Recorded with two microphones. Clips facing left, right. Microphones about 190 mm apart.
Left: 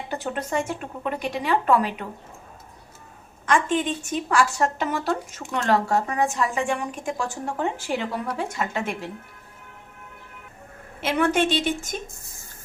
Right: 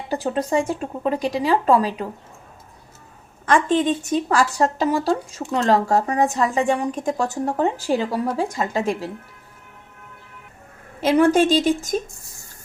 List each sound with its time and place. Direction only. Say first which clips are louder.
0.1 s speech: right 7 dB; 35° right (ahead or behind)
3.5 s speech: right 4 dB; 35° right (ahead or behind)
11.0 s speech: right 6 dB; 35° right (ahead or behind)